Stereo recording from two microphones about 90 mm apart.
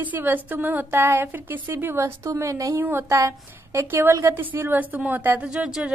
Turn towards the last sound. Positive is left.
turn(degrees=-10)  # may be behind; listen again after turning